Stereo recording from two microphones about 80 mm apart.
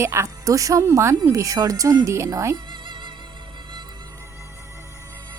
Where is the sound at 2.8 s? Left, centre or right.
Right.